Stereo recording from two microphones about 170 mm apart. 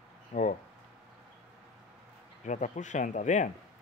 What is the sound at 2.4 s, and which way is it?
Speech, 45° left (ahead or behind).